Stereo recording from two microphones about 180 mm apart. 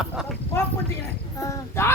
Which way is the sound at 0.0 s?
5° right (ahead or behind).